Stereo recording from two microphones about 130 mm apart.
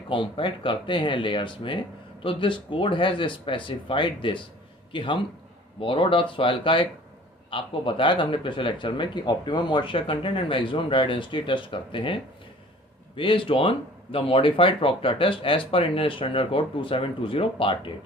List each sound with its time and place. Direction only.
0.1 s speech: 40° left (ahead or behind)